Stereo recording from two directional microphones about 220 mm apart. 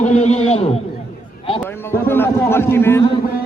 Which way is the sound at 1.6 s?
10° left (ahead or behind).